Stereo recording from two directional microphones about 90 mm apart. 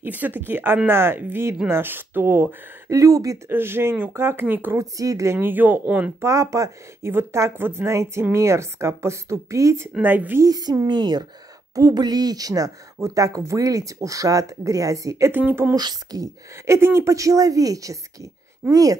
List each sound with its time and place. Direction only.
0.0 s speech: 20° right (ahead or behind)
3.0 s speech: 35° right (ahead or behind)
3.4 s speech: 25° right (ahead or behind)
4.7 s speech: 40° right (ahead or behind); by 6.1 s 15° right (ahead or behind)
6.2 s speech: 35° right (ahead or behind)
10.0 s speech: 20° right (ahead or behind)
10.4 s a woman's voice: 45° right (ahead or behind)
15.3 s speech: 20° right (ahead or behind)
15.7 s a woman's voice: 45° right (ahead or behind)
16.6 s speech: 30° right (ahead or behind)